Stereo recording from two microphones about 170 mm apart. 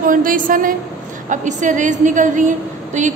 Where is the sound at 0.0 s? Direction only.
55° right (ahead or behind).